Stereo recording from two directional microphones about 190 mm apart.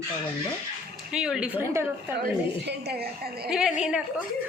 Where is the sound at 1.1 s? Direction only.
5° right (ahead or behind).